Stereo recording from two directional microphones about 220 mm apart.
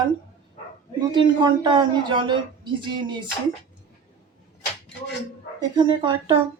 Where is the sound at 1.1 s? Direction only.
20° right (ahead or behind).